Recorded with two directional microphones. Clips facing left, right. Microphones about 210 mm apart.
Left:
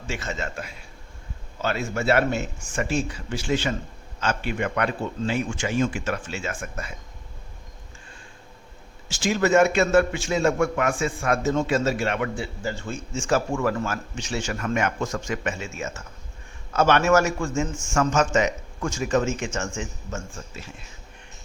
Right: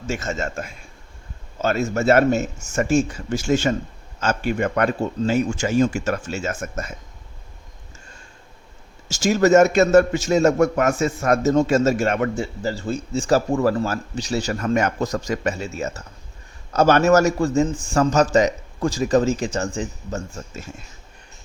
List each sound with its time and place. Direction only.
0.1 s a man's voice: 45° right (ahead or behind)
9.0 s a man's voice: 45° right (ahead or behind)